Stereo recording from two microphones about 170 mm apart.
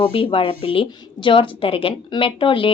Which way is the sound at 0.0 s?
30° left (ahead or behind).